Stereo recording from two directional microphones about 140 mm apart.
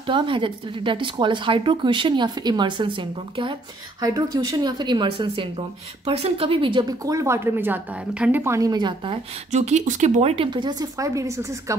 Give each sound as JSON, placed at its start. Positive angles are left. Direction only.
{"t": 0.0, "sound": "a woman's voice", "side_deg": -35}
{"t": 9.5, "sound": "speech", "side_deg": -55}
{"t": 10.3, "sound": "a woman's voice", "side_deg": -35}